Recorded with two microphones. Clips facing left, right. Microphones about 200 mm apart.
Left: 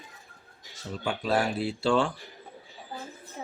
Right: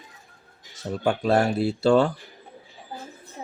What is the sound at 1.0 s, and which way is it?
Speech, 45° right (ahead or behind).